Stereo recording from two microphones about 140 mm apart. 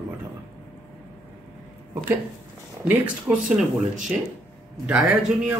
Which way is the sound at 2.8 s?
10° right (ahead or behind).